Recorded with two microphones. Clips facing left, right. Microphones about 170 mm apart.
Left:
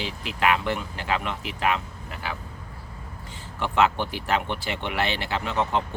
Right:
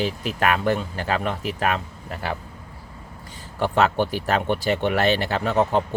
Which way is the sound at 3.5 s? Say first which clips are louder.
Right 3 dB; 40° right (ahead or behind).